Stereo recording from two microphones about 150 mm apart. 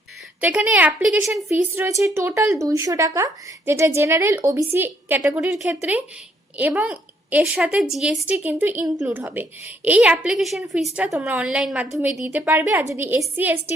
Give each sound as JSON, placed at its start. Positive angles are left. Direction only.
{"t": 0.4, "sound": "a woman's voice", "side_deg": -10}